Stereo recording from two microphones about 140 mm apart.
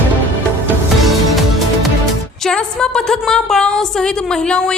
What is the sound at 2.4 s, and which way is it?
A woman's voice, 5° left (ahead or behind).